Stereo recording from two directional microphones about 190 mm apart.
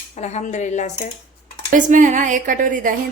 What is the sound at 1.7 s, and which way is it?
Speech, 40° right (ahead or behind).